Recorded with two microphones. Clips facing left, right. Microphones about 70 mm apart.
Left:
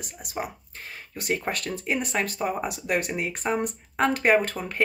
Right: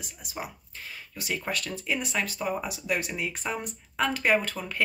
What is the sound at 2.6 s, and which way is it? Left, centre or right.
Speech, left.